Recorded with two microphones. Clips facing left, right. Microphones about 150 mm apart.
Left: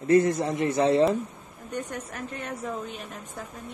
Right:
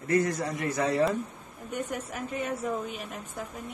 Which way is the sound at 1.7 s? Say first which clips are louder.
Even; 5° right (ahead or behind).